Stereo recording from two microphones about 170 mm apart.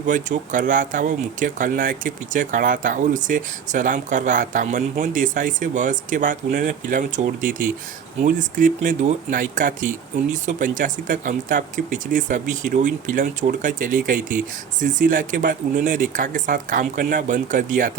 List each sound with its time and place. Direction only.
0.1 s speech: 50° right (ahead or behind)